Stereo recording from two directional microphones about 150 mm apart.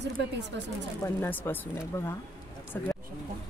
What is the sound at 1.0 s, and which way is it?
Speech, 15° left (ahead or behind).